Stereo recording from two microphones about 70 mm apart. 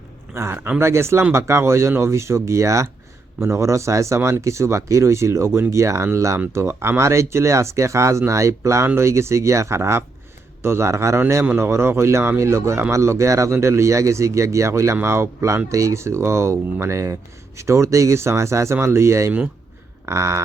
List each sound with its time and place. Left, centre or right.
0.3 s speech: right